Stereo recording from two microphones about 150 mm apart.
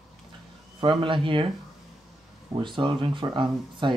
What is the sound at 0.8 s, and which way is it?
Speech, 35° right (ahead or behind).